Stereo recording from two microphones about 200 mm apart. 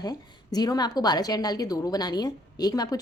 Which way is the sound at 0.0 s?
20° left (ahead or behind).